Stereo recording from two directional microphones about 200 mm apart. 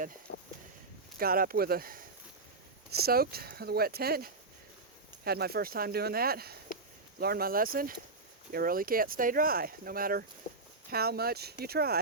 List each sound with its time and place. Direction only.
1.2 s speech: 45° right (ahead or behind)